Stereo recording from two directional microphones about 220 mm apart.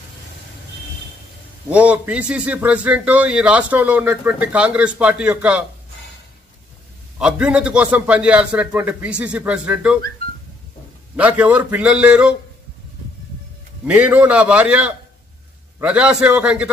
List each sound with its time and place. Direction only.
1.7 s a man's voice: 5° right (ahead or behind)
7.2 s a man's voice: 5° right (ahead or behind)
11.1 s a man's voice: 5° right (ahead or behind)
13.8 s a man's voice: 5° right (ahead or behind)